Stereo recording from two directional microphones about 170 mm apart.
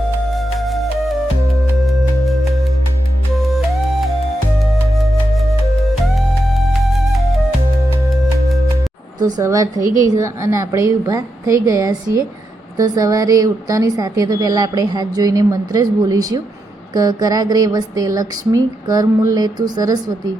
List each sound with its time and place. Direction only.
0.3 s music: centre (ahead or behind)
2.2 s music: centre (ahead or behind)
5.9 s music: centre (ahead or behind)
9.2 s a woman's voice: 20° right (ahead or behind)